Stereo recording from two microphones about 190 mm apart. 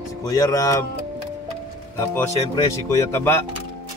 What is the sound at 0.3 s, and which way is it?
Speech, 20° left (ahead or behind).